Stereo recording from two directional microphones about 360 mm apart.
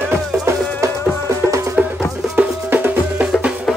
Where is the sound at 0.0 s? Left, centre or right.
Centre.